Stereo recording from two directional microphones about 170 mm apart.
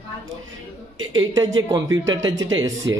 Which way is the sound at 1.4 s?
20° right (ahead or behind).